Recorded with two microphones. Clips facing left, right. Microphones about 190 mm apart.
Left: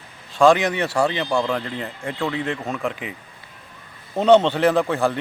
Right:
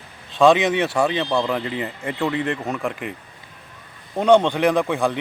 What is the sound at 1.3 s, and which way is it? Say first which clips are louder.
Speech: right 1 dB; 5° right (ahead or behind).